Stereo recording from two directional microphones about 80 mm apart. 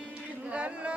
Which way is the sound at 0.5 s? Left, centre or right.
Centre.